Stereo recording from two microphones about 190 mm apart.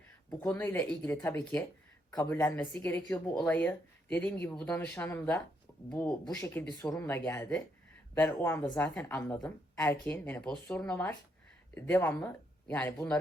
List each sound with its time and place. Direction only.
0.3 s a woman's voice: 10° left (ahead or behind)
2.4 s a woman's voice: 5° left (ahead or behind)
6.2 s a woman's voice: 15° left (ahead or behind)